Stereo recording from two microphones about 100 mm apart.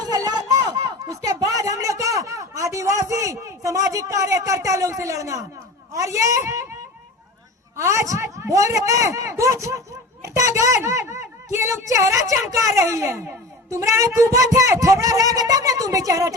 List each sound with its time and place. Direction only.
0.0 s a sound: 40° right (ahead or behind)
5.9 s speech: 35° right (ahead or behind)
7.8 s a woman's voice: 30° right (ahead or behind)